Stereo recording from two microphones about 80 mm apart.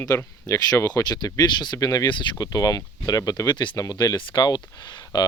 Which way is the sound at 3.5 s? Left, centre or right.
Left.